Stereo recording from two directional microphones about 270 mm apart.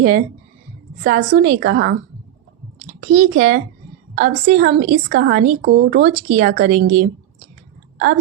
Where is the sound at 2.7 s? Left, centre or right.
Right.